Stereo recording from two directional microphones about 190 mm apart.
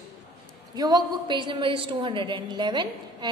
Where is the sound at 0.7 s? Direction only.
20° right (ahead or behind).